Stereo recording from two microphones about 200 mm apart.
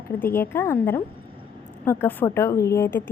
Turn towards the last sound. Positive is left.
turn(degrees=10)  # may be behind; listen again after turning